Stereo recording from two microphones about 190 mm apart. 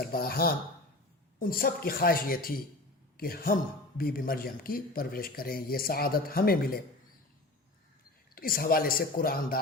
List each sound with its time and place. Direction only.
0.0 s speech: 55° left (ahead or behind)
8.4 s speech: 50° left (ahead or behind)